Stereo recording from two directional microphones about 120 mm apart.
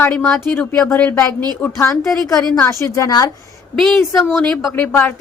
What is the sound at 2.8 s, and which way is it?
Speech, 25° left (ahead or behind).